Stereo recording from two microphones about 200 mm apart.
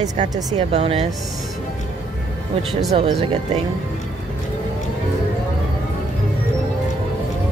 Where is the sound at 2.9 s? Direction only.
25° right (ahead or behind).